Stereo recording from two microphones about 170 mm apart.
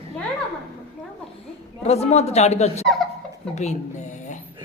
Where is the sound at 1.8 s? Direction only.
35° left (ahead or behind).